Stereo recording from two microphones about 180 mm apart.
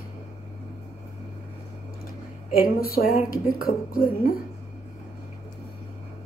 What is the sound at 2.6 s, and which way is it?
A woman's voice, 55° left (ahead or behind).